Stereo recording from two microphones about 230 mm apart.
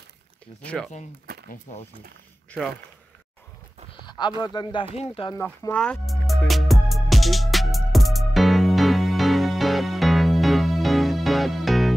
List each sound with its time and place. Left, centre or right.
1.5 s speech: left
4.0 s a sound: centre
4.4 s speech: centre
5.4 s music: centre